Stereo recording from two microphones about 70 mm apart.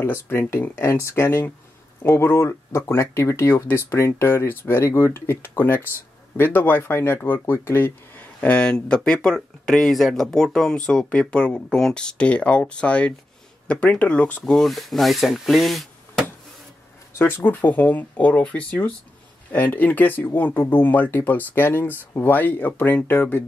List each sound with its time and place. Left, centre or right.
0.0 s speech: left
14.4 s speech: centre
17.1 s speech: left